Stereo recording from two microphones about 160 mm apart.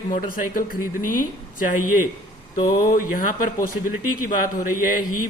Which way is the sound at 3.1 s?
60° left (ahead or behind).